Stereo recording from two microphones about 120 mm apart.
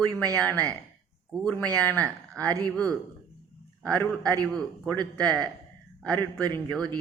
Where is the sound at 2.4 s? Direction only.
30° right (ahead or behind).